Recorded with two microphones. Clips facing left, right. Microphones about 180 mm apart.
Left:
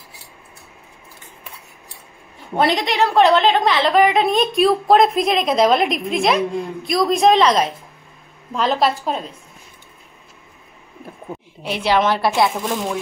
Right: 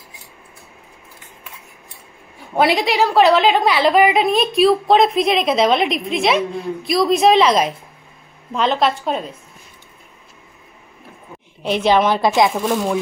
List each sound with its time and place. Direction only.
2.5 s a woman's voice: 5° right (ahead or behind)
11.8 s a woman's voice: 15° right (ahead or behind)